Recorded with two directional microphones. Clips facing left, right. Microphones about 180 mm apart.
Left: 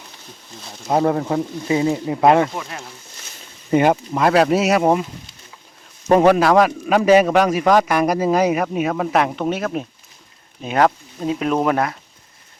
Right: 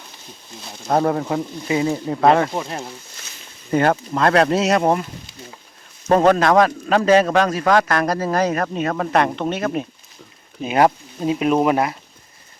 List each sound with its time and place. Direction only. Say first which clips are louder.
0.9 s a man's voice: even; 10° left (ahead or behind)
1.6 s speech: left 1 dB; 25° left (ahead or behind)
1.9 s a man's voice: left 1 dB; 15° left (ahead or behind)
2.6 s speech: right 4 dB; 30° right (ahead or behind)
3.7 s a man's voice: left 2 dB; 15° left (ahead or behind)
6.1 s a man's voice: left 1 dB; 10° left (ahead or behind)
10.6 s speech: right 1 dB; 10° right (ahead or behind)